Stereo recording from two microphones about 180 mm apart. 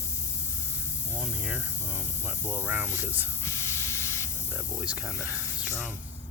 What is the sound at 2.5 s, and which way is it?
Speech, 10° right (ahead or behind).